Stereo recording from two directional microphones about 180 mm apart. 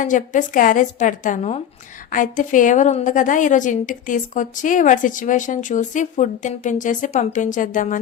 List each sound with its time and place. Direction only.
0.0 s a woman's voice: 45° left (ahead or behind)
2.0 s a woman's voice: 45° left (ahead or behind)